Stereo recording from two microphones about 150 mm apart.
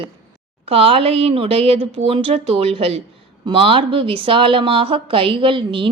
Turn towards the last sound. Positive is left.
turn(degrees=-35)  # may be behind; listen again after turning